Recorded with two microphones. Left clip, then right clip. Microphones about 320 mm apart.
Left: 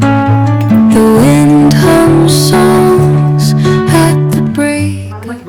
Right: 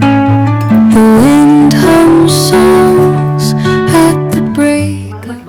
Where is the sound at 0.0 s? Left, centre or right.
Left.